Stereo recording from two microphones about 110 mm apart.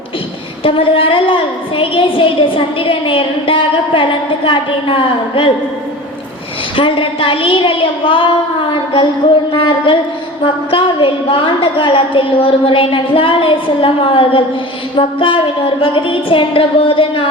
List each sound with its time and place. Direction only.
0.6 s a woman's voice: 55° left (ahead or behind)
6.7 s a woman's voice: 55° left (ahead or behind)